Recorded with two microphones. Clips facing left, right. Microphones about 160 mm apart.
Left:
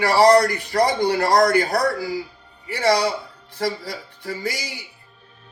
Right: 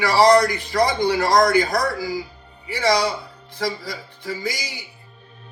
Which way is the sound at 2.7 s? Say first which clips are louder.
Left 1 dB; 55° left (ahead or behind).